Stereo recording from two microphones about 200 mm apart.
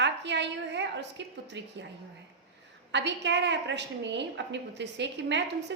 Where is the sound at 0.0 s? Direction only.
60° right (ahead or behind).